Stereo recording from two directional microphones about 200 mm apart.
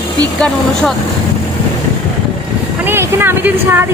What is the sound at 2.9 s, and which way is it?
Speech, 10° right (ahead or behind).